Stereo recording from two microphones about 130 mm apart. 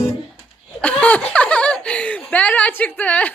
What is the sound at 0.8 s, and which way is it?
Giggle, 10° left (ahead or behind).